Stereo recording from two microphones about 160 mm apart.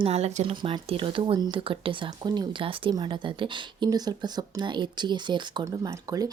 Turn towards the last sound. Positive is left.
turn(degrees=-20)  # may be behind; listen again after turning